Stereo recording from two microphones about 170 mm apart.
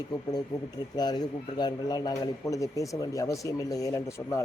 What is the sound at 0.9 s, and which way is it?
A man's voice, 25° left (ahead or behind).